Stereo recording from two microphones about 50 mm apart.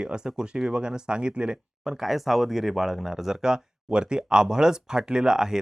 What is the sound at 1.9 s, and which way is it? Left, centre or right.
Speech, centre.